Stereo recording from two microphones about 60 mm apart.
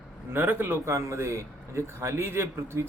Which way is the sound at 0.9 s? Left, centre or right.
Right.